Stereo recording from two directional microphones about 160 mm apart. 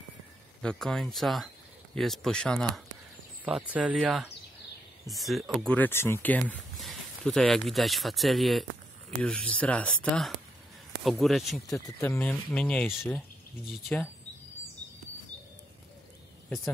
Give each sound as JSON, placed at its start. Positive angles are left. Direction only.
{"t": 0.6, "sound": "speech", "side_deg": 5}
{"t": 3.4, "sound": "speech", "side_deg": -10}
{"t": 11.6, "sound": "speech", "side_deg": 20}